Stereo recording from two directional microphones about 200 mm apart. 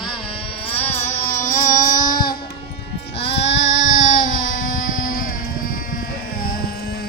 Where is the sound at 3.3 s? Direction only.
65° left (ahead or behind).